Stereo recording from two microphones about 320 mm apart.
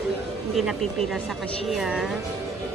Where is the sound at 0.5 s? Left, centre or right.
Centre.